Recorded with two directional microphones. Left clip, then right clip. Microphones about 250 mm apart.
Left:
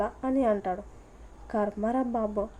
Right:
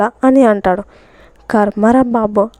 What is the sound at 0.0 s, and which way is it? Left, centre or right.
A woman's voice, right.